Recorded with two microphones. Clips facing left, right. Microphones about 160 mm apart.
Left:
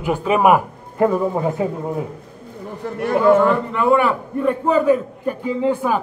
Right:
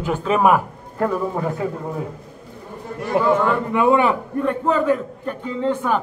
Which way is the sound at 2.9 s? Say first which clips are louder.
Left 5 dB; 75° left (ahead or behind).